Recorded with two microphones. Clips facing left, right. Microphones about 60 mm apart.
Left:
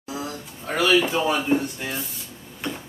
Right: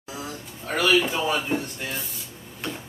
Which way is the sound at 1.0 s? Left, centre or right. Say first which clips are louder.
Left 3 dB; centre.